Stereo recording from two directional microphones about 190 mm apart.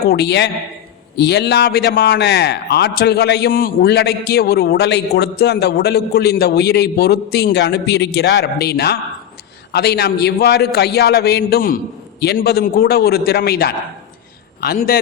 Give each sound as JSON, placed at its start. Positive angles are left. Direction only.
{"t": 0.0, "sound": "a man's voice", "side_deg": 55}